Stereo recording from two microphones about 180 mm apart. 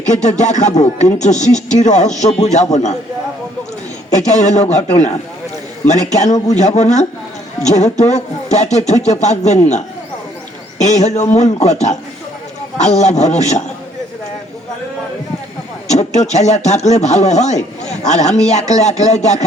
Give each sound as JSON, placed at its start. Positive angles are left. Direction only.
{"t": 0.0, "sound": "speech", "side_deg": 40}
{"t": 4.1, "sound": "speech", "side_deg": 40}
{"t": 15.9, "sound": "speech", "side_deg": 40}